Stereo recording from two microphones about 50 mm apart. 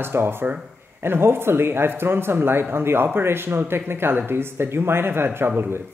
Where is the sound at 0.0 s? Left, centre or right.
Right.